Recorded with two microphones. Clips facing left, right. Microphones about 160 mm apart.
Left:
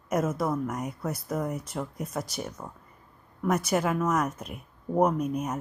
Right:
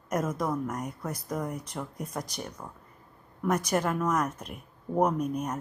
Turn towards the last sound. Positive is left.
turn(degrees=5)  # may be behind; listen again after turning